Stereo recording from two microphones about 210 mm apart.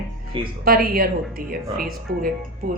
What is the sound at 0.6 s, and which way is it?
A woman's voice, 45° right (ahead or behind).